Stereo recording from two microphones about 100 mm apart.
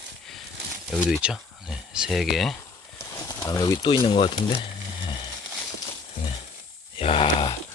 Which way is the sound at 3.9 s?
55° left (ahead or behind).